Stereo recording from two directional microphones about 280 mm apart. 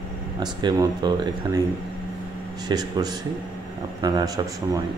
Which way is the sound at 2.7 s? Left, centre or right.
Centre.